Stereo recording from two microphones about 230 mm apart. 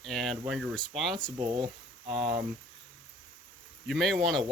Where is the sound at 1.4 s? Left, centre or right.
Right.